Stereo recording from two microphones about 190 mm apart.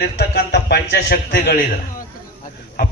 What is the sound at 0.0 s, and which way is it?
A man's voice, 60° left (ahead or behind).